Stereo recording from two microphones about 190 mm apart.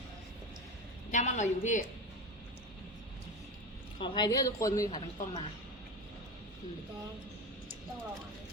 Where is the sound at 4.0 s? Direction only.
20° left (ahead or behind).